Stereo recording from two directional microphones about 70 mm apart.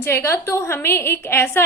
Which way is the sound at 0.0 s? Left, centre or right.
Left.